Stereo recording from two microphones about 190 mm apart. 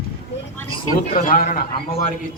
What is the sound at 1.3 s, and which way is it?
Speech, 45° left (ahead or behind).